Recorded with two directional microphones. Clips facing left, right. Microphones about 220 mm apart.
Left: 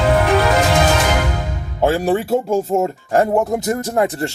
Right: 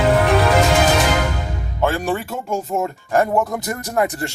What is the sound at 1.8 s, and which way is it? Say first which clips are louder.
Speech: left 4 dB; 35° left (ahead or behind).